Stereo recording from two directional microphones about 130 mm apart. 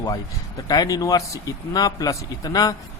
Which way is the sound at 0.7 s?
30° left (ahead or behind).